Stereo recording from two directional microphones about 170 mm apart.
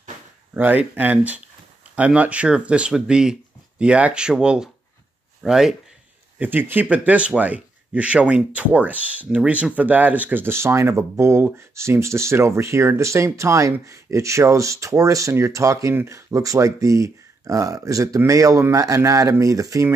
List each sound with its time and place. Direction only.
0.6 s speech: 10° right (ahead or behind)